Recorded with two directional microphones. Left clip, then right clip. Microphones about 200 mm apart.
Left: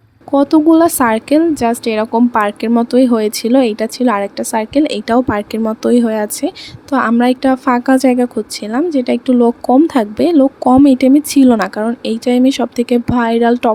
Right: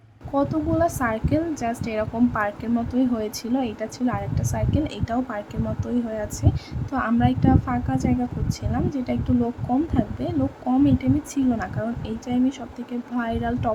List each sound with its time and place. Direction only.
0.3 s a woman's voice: 35° left (ahead or behind)